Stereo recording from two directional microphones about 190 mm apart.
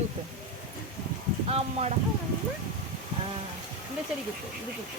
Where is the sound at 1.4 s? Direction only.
35° right (ahead or behind).